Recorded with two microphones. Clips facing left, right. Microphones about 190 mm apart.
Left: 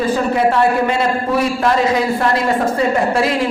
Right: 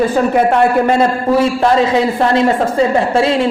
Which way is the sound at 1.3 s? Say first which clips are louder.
Right 5 dB; 30° right (ahead or behind).